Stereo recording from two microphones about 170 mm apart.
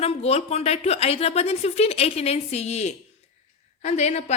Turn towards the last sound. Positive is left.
turn(degrees=40)  # may be behind; listen again after turning